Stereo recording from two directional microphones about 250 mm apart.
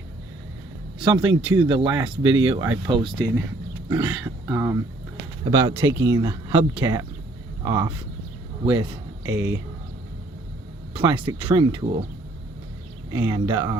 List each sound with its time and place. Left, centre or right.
0.9 s a man's voice: centre
9.3 s speech: centre
10.9 s speech: centre
13.1 s speech: centre